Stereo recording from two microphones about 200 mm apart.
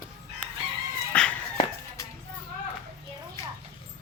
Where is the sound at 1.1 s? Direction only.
5° left (ahead or behind).